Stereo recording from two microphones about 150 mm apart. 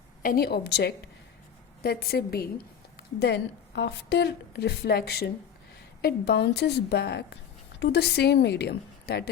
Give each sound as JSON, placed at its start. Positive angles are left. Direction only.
{"t": 0.2, "sound": "a woman's voice", "side_deg": 80}